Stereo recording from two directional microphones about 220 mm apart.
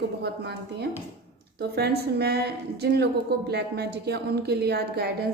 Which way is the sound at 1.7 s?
45° right (ahead or behind).